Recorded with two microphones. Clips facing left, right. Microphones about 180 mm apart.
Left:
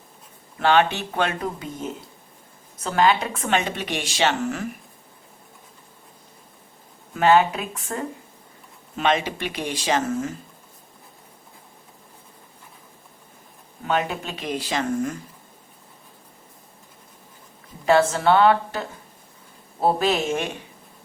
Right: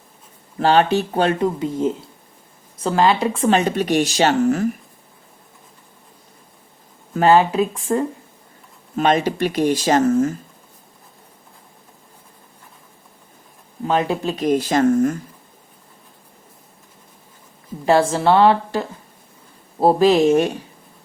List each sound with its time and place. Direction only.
0.6 s speech: 35° right (ahead or behind)
7.1 s speech: 35° right (ahead or behind)
9.0 s speech: 45° right (ahead or behind)
13.8 s speech: 35° right (ahead or behind)
17.8 s speech: 30° right (ahead or behind)